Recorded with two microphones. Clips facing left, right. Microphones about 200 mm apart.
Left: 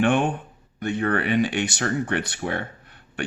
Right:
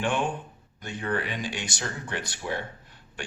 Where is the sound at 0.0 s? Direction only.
60° left (ahead or behind).